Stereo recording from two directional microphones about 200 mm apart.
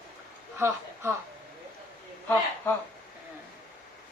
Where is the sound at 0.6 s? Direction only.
10° right (ahead or behind).